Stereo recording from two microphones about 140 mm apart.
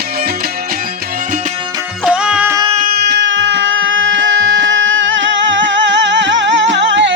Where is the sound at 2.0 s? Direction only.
5° right (ahead or behind).